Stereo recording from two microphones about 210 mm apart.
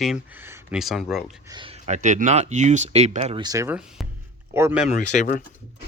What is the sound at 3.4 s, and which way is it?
Speech, 15° right (ahead or behind).